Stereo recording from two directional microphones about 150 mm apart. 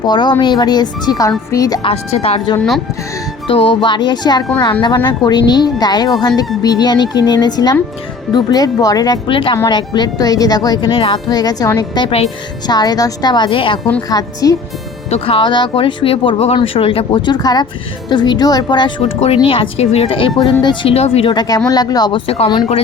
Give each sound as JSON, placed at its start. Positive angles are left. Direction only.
{"t": 0.0, "sound": "speech", "side_deg": 30}
{"t": 1.8, "sound": "a woman's voice", "side_deg": 40}
{"t": 2.6, "sound": "speech", "side_deg": 0}
{"t": 3.4, "sound": "a woman's voice", "side_deg": 35}
{"t": 14.1, "sound": "speech", "side_deg": 25}
{"t": 15.1, "sound": "a woman's voice", "side_deg": 40}
{"t": 21.3, "sound": "speech", "side_deg": 25}